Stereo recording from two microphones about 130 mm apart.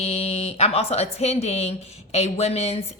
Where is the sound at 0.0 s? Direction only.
50° left (ahead or behind).